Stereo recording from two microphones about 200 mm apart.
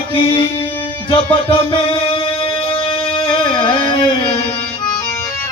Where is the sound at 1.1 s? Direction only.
25° left (ahead or behind).